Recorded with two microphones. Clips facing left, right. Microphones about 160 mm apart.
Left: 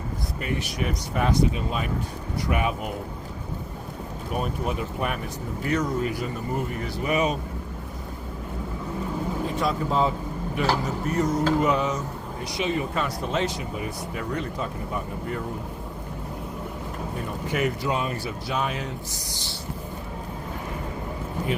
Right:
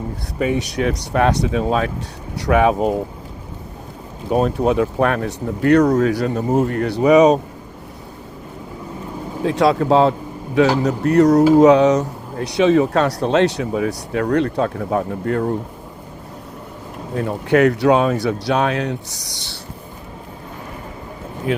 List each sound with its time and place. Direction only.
0.8 s speech: 90° right; by 2.6 s 70° right (ahead or behind)
4.3 s speech: 90° right
9.4 s speech: 85° right
11.5 s speech: 85° right
17.2 s speech: 75° right (ahead or behind)